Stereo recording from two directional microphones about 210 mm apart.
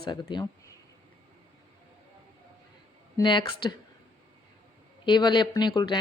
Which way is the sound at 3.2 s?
20° left (ahead or behind).